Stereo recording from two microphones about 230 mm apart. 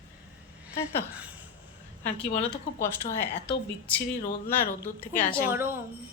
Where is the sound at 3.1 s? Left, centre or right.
Centre.